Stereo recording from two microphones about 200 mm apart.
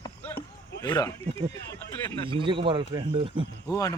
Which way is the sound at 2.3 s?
25° right (ahead or behind).